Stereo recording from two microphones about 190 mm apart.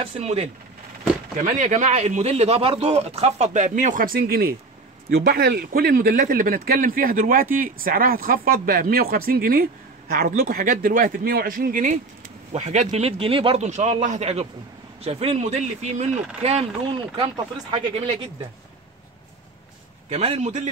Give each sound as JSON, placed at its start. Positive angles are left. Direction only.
{"t": 0.0, "sound": "speech", "side_deg": -35}
{"t": 20.1, "sound": "speech", "side_deg": -30}